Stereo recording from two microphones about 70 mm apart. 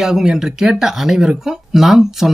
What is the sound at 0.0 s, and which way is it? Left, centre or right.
Speech, centre.